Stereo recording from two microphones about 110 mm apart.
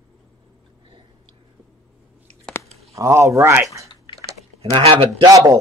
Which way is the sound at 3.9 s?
50° left (ahead or behind).